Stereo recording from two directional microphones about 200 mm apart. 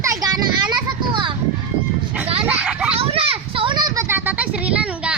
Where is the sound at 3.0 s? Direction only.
30° right (ahead or behind).